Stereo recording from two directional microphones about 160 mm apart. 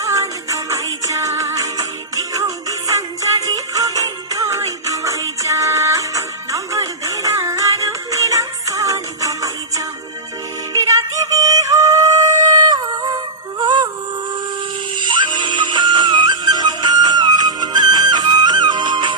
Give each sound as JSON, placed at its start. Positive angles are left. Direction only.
{"t": 0.0, "sound": "music", "side_deg": -20}
{"t": 10.7, "sound": "yodeling", "side_deg": -20}
{"t": 14.9, "sound": "music", "side_deg": -30}